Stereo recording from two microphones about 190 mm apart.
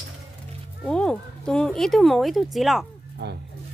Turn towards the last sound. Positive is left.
turn(degrees=-60)  # may be behind; listen again after turning